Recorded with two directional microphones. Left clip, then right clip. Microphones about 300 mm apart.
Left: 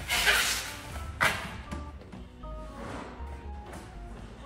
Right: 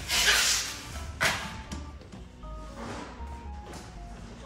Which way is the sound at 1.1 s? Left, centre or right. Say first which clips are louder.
Even; centre.